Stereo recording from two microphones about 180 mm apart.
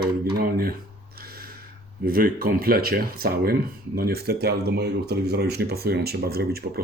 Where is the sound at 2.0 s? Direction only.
55° right (ahead or behind).